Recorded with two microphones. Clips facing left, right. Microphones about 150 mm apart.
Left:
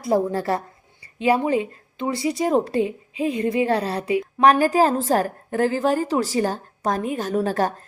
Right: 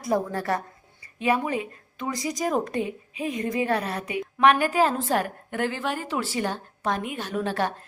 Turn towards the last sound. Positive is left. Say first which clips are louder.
# left 5 dB
turn(degrees=40)  # may be behind; listen again after turning